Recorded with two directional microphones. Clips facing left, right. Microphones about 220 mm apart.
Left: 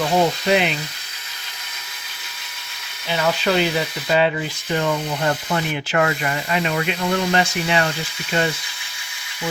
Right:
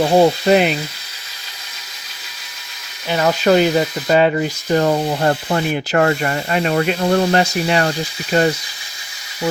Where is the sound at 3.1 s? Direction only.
45° right (ahead or behind).